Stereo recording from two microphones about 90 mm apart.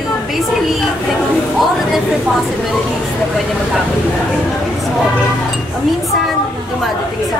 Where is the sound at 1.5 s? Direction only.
Centre (ahead or behind).